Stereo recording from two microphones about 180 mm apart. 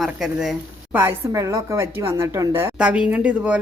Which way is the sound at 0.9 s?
15° right (ahead or behind).